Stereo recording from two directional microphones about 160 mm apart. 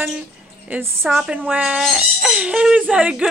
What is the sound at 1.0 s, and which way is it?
Speech, centre (ahead or behind).